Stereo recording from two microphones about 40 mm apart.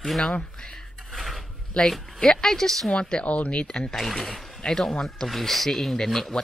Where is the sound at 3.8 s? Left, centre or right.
Centre.